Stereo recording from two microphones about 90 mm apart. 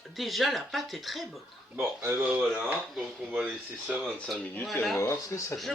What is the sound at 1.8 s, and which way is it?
Speech, 25° right (ahead or behind).